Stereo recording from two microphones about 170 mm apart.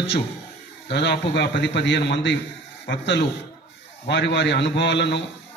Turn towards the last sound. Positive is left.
turn(degrees=90)